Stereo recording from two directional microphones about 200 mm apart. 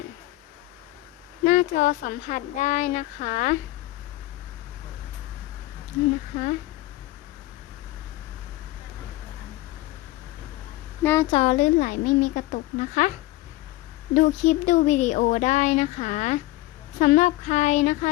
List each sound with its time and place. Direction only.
1.5 s speech: 40° left (ahead or behind)
11.0 s speech: 10° left (ahead or behind)
11.3 s a woman's voice: 30° left (ahead or behind)
11.5 s speech: 40° left (ahead or behind)
14.1 s speech: 40° left (ahead or behind)